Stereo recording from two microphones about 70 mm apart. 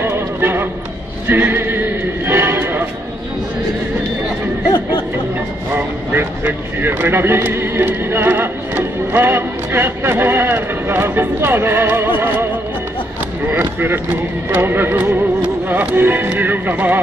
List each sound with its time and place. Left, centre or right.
0.0 s music: right
1.2 s horse: right
5.7 s speech: right
13.5 s speech: right